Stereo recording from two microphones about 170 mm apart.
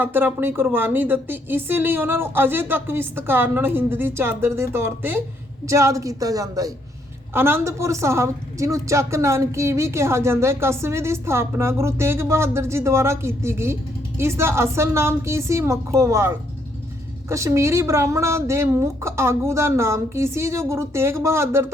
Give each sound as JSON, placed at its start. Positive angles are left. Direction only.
{"t": 0.0, "sound": "a woman's voice", "side_deg": -10}